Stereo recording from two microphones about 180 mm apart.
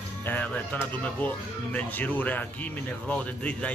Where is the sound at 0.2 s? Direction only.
10° left (ahead or behind).